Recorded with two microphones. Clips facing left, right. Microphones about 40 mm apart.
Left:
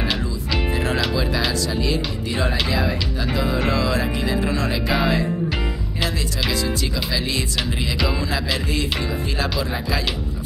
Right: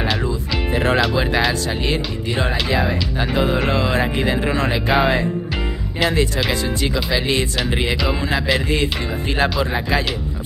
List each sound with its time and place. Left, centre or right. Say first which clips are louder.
1.9 s speech: right 2 dB; right
7.1 s speech: right 5 dB; right
9.4 s speech: right 7 dB; right